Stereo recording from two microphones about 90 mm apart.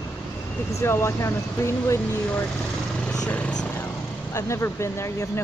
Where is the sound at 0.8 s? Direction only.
30° left (ahead or behind).